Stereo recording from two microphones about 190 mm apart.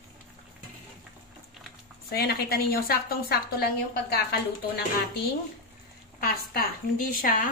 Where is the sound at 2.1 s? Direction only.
55° left (ahead or behind).